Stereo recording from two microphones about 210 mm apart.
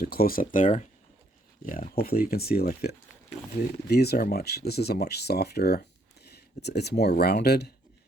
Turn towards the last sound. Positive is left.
turn(degrees=50)  # may be behind; listen again after turning